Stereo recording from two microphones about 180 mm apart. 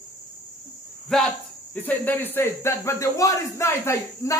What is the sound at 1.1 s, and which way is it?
Speech, centre (ahead or behind).